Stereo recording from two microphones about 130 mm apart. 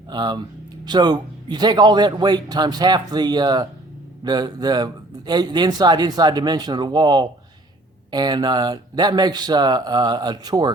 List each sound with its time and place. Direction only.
0.1 s speech: 35° right (ahead or behind)